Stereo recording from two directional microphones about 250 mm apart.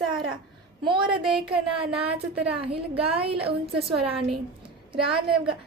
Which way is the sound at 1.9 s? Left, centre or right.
Right.